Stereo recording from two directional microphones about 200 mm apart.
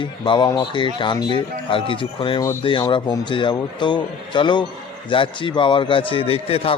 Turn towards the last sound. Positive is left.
turn(degrees=30)  # may be behind; listen again after turning